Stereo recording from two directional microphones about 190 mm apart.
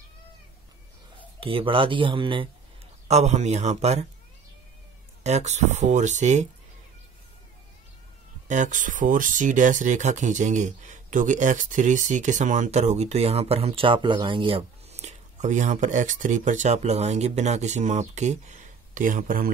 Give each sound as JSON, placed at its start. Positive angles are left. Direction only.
{"t": 1.4, "sound": "speech", "side_deg": -25}
{"t": 5.2, "sound": "speech", "side_deg": -35}
{"t": 8.5, "sound": "speech", "side_deg": -40}